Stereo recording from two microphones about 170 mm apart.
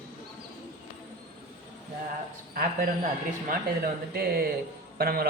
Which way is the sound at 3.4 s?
65° right (ahead or behind).